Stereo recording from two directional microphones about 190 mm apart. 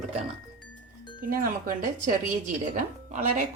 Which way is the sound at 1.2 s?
50° right (ahead or behind).